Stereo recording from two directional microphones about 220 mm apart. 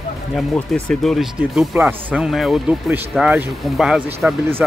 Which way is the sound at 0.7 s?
Centre (ahead or behind).